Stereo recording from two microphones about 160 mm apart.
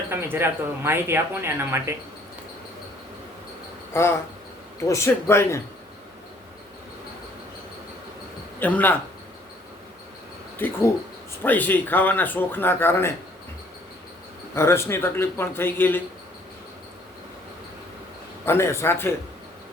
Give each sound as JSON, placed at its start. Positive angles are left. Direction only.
{"t": 0.1, "sound": "speech", "side_deg": -15}
{"t": 3.9, "sound": "speech", "side_deg": 15}
{"t": 8.5, "sound": "speech", "side_deg": 10}
{"t": 10.6, "sound": "speech", "side_deg": 15}
{"t": 14.5, "sound": "speech", "side_deg": 15}
{"t": 18.4, "sound": "speech", "side_deg": 15}